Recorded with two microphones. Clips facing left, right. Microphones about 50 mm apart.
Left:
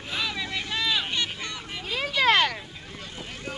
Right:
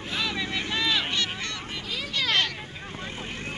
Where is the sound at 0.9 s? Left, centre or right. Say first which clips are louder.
Even; centre.